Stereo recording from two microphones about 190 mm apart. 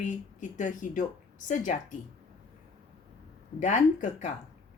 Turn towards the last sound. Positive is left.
turn(degrees=40)  # may be behind; listen again after turning